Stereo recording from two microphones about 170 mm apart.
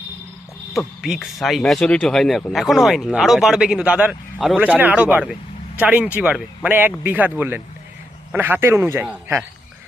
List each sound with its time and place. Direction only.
0.7 s speech: centre (ahead or behind)